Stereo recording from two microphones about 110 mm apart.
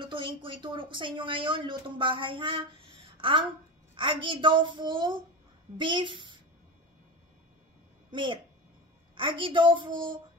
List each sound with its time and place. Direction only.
0.0 s a child's voice: 50° right (ahead or behind)
8.1 s a child's voice: 50° right (ahead or behind)